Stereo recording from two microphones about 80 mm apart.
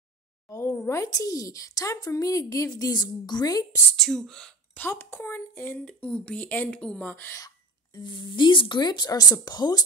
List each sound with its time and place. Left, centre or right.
0.7 s a woman's voice: left
2.7 s speech: left
3.9 s speech: centre
4.7 s speech: left
5.9 s speech: centre
8.0 s speech: left